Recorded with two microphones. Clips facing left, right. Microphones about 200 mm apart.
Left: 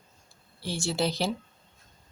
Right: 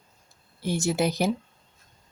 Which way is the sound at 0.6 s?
20° right (ahead or behind).